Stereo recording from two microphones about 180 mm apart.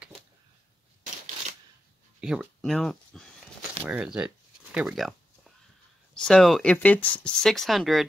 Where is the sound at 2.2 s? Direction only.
5° right (ahead or behind).